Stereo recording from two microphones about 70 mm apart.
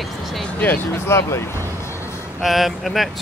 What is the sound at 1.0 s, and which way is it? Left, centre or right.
Speech, left.